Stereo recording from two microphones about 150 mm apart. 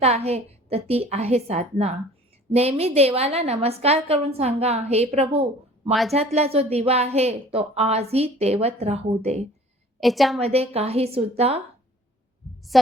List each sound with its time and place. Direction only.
0.0 s a woman's voice: 45° right (ahead or behind)
5.9 s a woman's voice: centre (ahead or behind)
6.1 s a woman's voice: 45° right (ahead or behind)
10.0 s a woman's voice: centre (ahead or behind)
10.4 s a woman's voice: 45° right (ahead or behind)
12.7 s a woman's voice: centre (ahead or behind)